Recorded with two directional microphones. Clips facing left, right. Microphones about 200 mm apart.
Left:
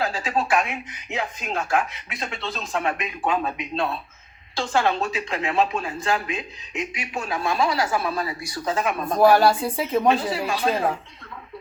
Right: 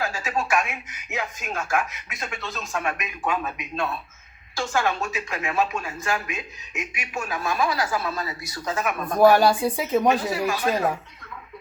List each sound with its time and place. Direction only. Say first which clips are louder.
0.0 s a woman's voice: left 2 dB; 30° left (ahead or behind)
9.7 s a woman's voice: even; centre (ahead or behind)
10.2 s a woman's voice: even; 30° left (ahead or behind)